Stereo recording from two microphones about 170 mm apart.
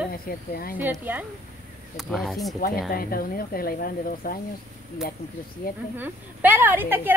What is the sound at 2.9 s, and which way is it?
Speech, 60° left (ahead or behind).